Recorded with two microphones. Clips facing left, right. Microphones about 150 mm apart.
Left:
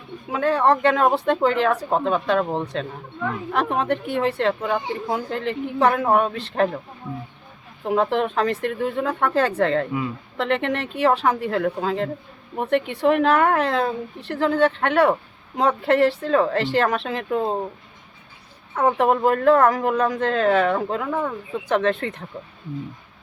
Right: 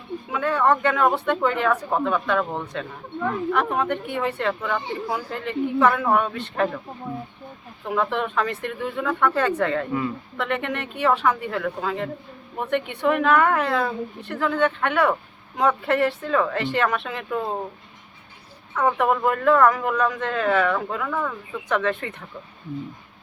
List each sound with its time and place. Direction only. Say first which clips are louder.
0.3 s speech: left 2 dB; 35° left (ahead or behind)
7.9 s speech: left 4 dB; 35° left (ahead or behind)
18.7 s speech: left 2 dB; 35° left (ahead or behind)